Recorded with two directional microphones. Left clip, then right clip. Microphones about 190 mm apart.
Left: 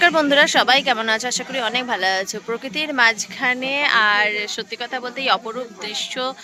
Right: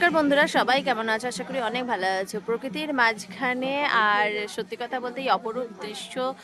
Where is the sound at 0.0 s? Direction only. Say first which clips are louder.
Left 6 dB; centre (ahead or behind).